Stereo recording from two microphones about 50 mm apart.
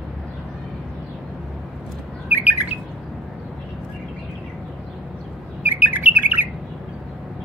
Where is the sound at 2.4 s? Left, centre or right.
Right.